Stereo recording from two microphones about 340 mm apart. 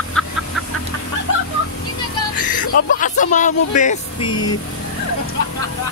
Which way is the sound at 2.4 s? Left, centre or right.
Left.